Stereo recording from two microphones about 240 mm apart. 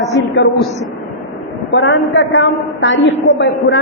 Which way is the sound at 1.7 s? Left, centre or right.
Left.